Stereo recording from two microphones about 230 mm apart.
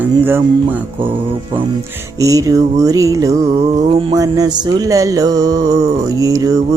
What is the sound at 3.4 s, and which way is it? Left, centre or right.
Music, right.